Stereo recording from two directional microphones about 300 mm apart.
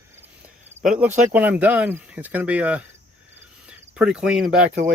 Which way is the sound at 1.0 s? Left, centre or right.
Centre.